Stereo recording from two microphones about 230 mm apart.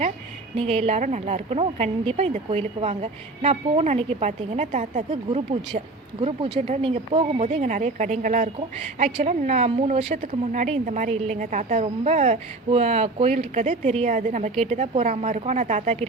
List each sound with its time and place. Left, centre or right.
0.5 s a woman's voice: right